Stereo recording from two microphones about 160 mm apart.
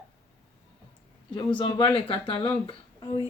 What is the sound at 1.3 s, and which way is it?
Speech, 30° left (ahead or behind).